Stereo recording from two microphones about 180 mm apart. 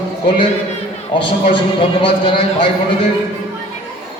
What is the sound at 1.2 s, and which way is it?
A man's voice, 30° left (ahead or behind).